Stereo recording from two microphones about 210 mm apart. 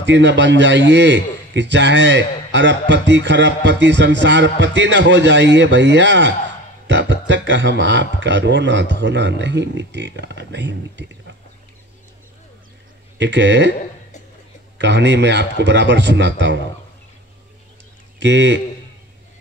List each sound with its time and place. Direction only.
0.0 s a man's voice: 60° right (ahead or behind)
13.2 s a man's voice: 60° right (ahead or behind)
14.8 s a man's voice: 55° right (ahead or behind)
18.2 s a man's voice: 60° right (ahead or behind)